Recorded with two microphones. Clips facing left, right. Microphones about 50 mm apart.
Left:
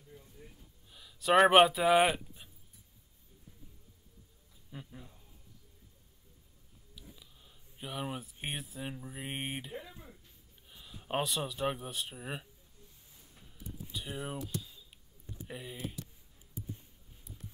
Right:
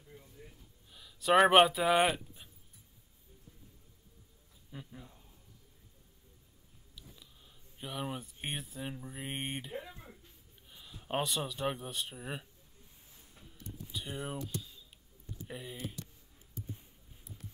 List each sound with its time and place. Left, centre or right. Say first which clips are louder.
0.9 s speech: even; centre
4.6 s speech: even; centre
7.0 s speech: left 1 dB; centre
9.8 s a sound: right 2 dB; centre
10.7 s speech: left 1 dB; centre
13.4 s a sound: even; centre
13.7 s typing: even; centre
15.4 s speech: left 1 dB; centre
16.6 s a sound: left 1 dB; centre